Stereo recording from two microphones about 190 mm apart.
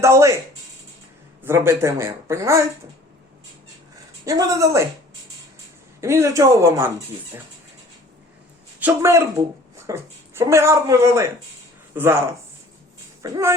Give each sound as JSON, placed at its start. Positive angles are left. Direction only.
{"t": 0.0, "sound": "speech", "side_deg": -15}
{"t": 1.5, "sound": "speech", "side_deg": -15}
{"t": 4.3, "sound": "speech", "side_deg": -15}
{"t": 6.0, "sound": "speech", "side_deg": -15}
{"t": 8.8, "sound": "speech", "side_deg": -15}
{"t": 13.2, "sound": "speech", "side_deg": -15}